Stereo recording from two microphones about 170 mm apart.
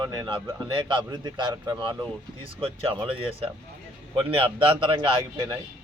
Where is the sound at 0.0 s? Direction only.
25° right (ahead or behind).